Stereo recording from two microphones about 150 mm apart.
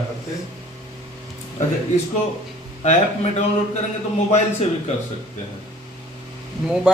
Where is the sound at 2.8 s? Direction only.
50° left (ahead or behind).